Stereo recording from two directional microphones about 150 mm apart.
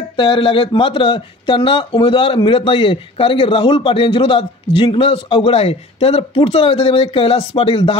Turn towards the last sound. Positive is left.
turn(degrees=40)  # may be behind; listen again after turning